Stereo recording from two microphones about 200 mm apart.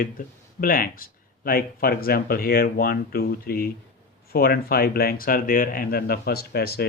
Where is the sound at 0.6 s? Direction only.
45° left (ahead or behind).